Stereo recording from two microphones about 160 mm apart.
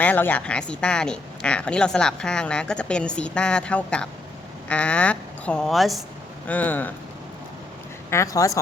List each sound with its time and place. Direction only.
0.0 s a woman's voice: 10° left (ahead or behind)
6.5 s a woman's voice: 10° left (ahead or behind)
8.1 s speech: 20° left (ahead or behind)